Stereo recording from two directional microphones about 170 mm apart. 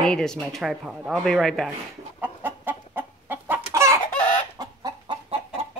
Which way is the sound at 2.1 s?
10° right (ahead or behind).